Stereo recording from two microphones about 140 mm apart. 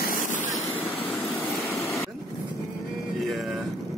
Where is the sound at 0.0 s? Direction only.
75° left (ahead or behind).